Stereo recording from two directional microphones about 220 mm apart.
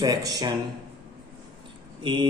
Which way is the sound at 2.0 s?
20° right (ahead or behind).